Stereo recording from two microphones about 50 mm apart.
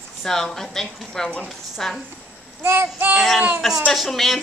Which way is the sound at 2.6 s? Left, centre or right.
Right.